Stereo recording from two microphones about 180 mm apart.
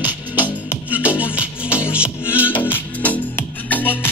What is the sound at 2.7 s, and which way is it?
Music, 10° left (ahead or behind).